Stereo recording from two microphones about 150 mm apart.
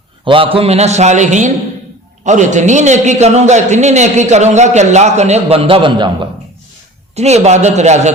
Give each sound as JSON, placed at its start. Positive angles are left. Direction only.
{"t": 0.3, "sound": "a man's voice", "side_deg": -35}
{"t": 7.2, "sound": "a man's voice", "side_deg": -45}